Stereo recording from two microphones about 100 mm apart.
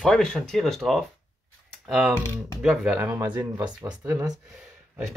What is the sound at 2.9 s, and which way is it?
Speech, 25° right (ahead or behind).